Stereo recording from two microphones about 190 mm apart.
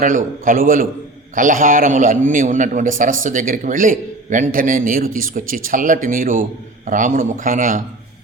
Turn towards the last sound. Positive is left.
turn(degrees=-40)  # may be behind; listen again after turning